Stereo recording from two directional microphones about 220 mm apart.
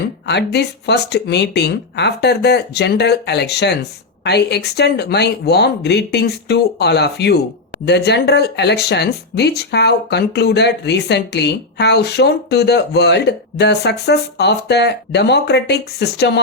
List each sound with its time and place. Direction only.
0.3 s speech: 50° left (ahead or behind)